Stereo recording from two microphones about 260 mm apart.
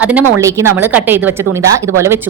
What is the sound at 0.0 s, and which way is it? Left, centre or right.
A woman's voice, centre.